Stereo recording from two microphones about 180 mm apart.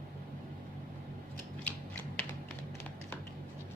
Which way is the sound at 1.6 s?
10° left (ahead or behind).